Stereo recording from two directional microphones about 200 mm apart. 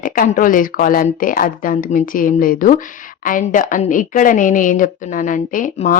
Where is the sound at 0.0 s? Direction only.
40° left (ahead or behind).